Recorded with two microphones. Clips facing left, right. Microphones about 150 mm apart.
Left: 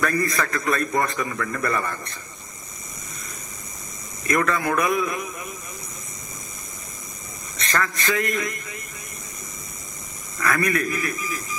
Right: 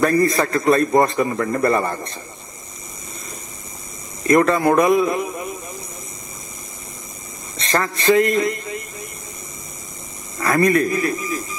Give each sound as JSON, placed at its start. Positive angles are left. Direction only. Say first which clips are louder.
{"t": 0.0, "sound": "a man's voice", "louder": "right 7 dB", "side_deg": -30}
{"t": 4.2, "sound": "a man's voice", "louder": "right 8 dB", "side_deg": -30}
{"t": 7.5, "sound": "a man's voice", "louder": "right 4 dB", "side_deg": -25}
{"t": 10.3, "sound": "a man's voice", "louder": "right 7 dB", "side_deg": -25}